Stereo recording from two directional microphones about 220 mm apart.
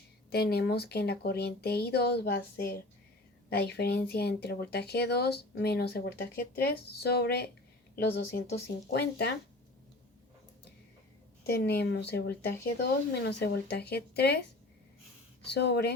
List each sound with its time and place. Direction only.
0.3 s speech: 45° left (ahead or behind)
11.4 s speech: 45° left (ahead or behind)
15.5 s speech: 50° left (ahead or behind)